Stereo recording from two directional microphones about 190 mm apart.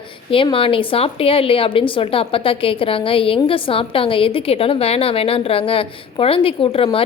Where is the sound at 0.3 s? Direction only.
30° left (ahead or behind).